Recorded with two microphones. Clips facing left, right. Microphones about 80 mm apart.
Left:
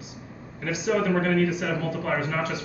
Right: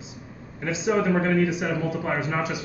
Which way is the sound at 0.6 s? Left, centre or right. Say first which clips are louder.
Right 1 dB; right.